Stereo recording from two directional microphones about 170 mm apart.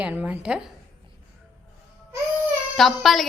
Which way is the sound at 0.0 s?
5° right (ahead or behind).